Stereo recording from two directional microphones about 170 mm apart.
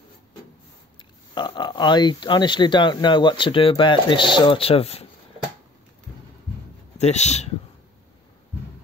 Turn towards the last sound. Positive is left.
turn(degrees=40)  # may be behind; listen again after turning